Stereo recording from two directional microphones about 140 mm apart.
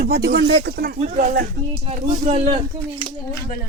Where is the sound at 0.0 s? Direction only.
90° right.